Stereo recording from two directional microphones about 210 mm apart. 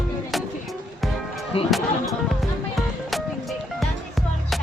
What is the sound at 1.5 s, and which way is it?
Speech, 25° left (ahead or behind).